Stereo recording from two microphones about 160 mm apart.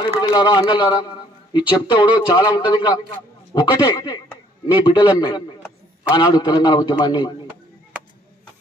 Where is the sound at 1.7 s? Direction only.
30° left (ahead or behind).